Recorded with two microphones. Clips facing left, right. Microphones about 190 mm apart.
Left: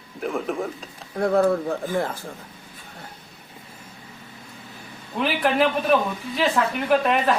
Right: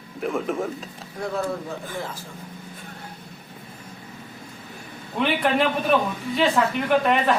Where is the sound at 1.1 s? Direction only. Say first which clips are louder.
Left 8 dB; 55° left (ahead or behind).